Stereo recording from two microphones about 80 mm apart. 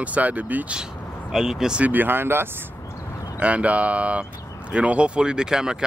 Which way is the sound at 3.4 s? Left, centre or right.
Centre.